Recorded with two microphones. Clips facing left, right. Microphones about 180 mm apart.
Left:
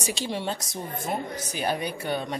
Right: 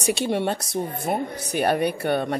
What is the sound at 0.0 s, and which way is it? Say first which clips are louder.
Speech: right 7 dB; 60° right (ahead or behind).